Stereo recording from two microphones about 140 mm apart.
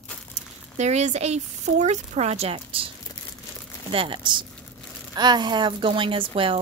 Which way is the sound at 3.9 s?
35° right (ahead or behind).